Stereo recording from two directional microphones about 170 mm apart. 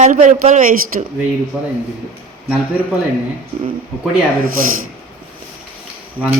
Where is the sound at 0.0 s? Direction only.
45° right (ahead or behind).